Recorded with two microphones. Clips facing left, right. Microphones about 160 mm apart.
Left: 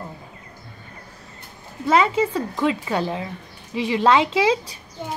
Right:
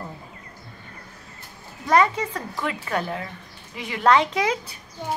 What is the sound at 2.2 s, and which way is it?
Speech, 15° left (ahead or behind).